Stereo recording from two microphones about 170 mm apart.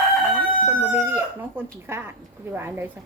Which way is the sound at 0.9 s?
15° right (ahead or behind).